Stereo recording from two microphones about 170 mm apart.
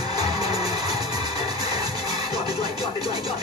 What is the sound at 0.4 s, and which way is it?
Music, 35° left (ahead or behind).